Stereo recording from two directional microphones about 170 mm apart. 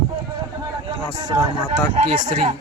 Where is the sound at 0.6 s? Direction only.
25° right (ahead or behind).